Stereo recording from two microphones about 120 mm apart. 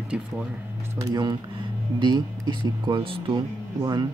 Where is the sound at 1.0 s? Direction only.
35° right (ahead or behind).